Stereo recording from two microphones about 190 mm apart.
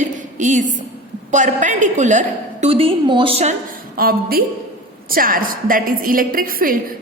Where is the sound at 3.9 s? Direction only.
50° right (ahead or behind).